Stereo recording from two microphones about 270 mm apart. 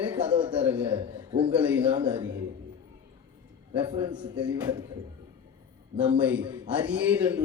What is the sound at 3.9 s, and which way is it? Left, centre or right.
Speech, centre.